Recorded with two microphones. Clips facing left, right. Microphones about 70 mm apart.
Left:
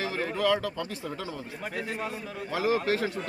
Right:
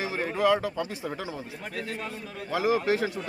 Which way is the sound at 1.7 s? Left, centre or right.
Centre.